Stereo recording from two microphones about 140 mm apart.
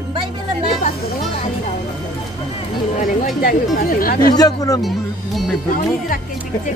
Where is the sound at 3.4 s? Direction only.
90° left.